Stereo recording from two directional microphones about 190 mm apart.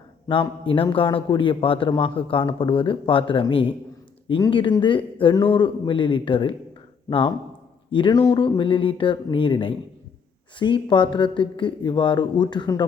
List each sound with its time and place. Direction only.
0.3 s a man's voice: 25° left (ahead or behind)